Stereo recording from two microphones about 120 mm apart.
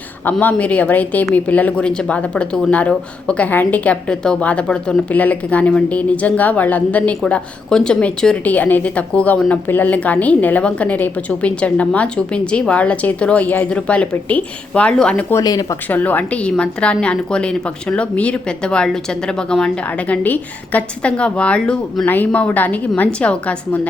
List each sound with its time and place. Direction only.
0.3 s speech: 15° left (ahead or behind)
15.3 s speech: 30° left (ahead or behind)
15.9 s speech: 15° left (ahead or behind)